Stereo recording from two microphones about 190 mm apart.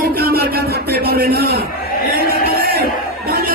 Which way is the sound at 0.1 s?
55° right (ahead or behind).